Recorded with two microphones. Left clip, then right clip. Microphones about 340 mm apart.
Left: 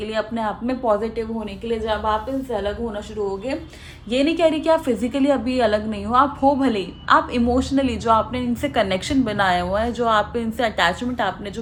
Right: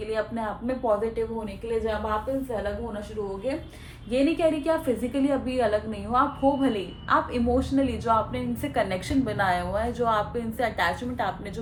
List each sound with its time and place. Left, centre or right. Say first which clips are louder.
0.0 s a woman's voice: left 5 dB; left
4.1 s a woman's voice: left 5 dB; left